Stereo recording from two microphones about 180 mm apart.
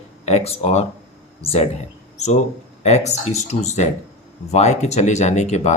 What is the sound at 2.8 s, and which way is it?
Speech, 40° left (ahead or behind).